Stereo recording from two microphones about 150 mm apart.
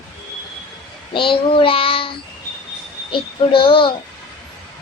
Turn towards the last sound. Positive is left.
turn(degrees=35)  # may be behind; listen again after turning